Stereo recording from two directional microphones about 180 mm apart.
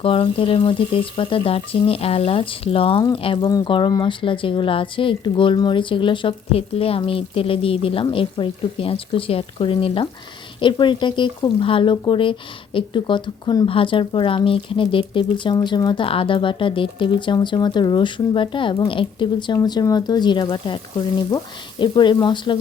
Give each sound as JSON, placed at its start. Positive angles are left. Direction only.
{"t": 0.0, "sound": "speech", "side_deg": 30}